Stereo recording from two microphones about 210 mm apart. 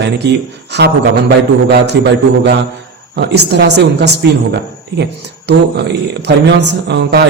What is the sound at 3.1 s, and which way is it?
A woman's voice, 50° right (ahead or behind).